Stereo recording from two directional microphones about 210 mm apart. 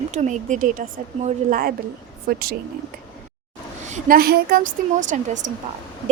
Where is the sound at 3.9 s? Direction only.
45° right (ahead or behind).